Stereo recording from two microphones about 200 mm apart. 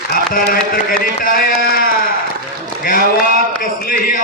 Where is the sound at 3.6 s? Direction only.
45° left (ahead or behind).